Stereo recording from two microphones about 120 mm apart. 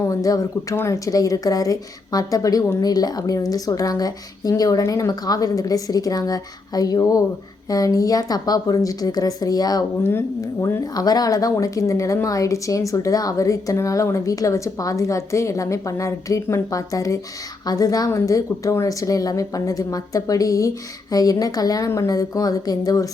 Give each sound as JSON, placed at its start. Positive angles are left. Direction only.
{"t": 0.1, "sound": "a woman's voice", "side_deg": 30}
{"t": 10.0, "sound": "speech", "side_deg": 20}
{"t": 10.9, "sound": "speech", "side_deg": 30}